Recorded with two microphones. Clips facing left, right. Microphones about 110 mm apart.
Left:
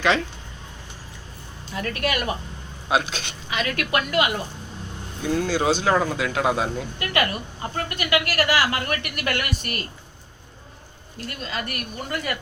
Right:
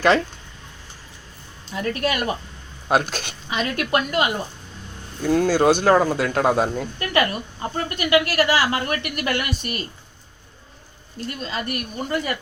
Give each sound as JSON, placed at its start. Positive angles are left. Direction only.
{"t": 1.7, "sound": "a woman's voice", "side_deg": -25}
{"t": 2.9, "sound": "speech", "side_deg": -45}
{"t": 3.5, "sound": "a woman's voice", "side_deg": -30}
{"t": 5.2, "sound": "speech", "side_deg": -45}
{"t": 7.0, "sound": "a woman's voice", "side_deg": -30}
{"t": 11.2, "sound": "a woman's voice", "side_deg": -25}